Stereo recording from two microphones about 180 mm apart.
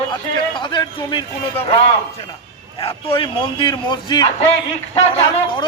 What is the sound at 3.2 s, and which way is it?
A man's voice, 25° left (ahead or behind).